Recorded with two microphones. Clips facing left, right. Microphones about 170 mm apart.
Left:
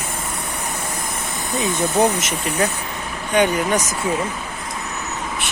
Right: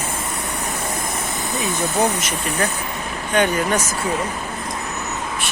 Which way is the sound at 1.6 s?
20° left (ahead or behind).